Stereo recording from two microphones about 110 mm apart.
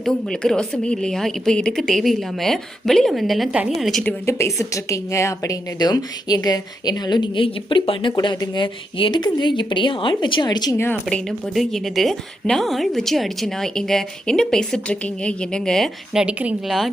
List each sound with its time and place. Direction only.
0.0 s a woman's voice: 5° left (ahead or behind)
4.3 s a woman's voice: 25° left (ahead or behind)
11.0 s a woman's voice: 5° left (ahead or behind)
16.1 s a woman's voice: 10° right (ahead or behind)